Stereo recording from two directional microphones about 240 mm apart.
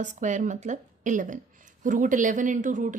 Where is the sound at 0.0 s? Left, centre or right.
Right.